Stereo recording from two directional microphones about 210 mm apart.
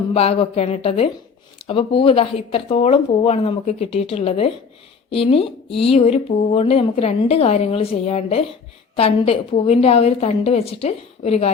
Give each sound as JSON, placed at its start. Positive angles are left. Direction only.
{"t": 0.1, "sound": "speech", "side_deg": 25}